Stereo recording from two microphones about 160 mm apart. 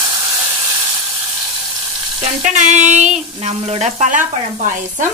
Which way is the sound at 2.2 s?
45° right (ahead or behind).